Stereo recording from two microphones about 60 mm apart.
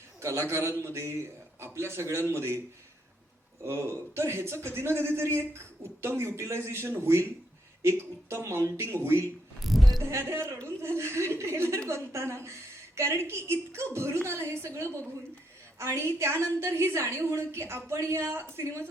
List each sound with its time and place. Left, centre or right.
0.2 s a woman's voice: right
3.6 s a woman's voice: right
9.6 s a sound: centre
10.1 s a woman's voice: right